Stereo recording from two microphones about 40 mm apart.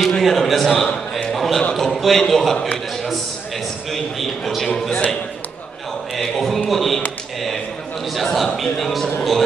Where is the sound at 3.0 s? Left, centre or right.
Centre.